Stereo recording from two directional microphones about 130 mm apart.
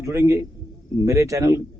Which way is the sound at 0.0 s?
20° right (ahead or behind).